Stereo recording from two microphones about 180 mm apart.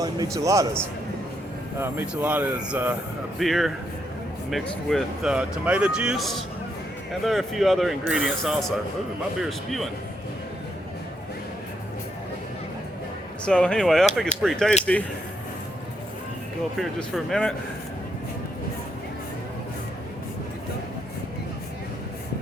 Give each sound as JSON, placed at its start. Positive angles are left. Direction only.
{"t": 0.0, "sound": "speech", "side_deg": -20}
{"t": 13.4, "sound": "speech", "side_deg": 5}
{"t": 16.7, "sound": "speech", "side_deg": 0}